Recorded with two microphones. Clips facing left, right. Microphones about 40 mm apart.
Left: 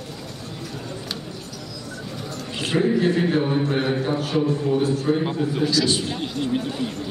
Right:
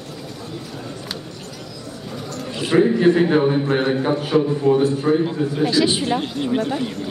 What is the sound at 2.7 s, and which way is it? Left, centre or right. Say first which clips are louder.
A man's voice: right 5 dB; centre.